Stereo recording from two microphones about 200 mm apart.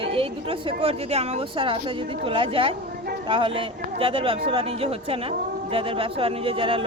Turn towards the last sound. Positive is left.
turn(degrees=-25)  # may be behind; listen again after turning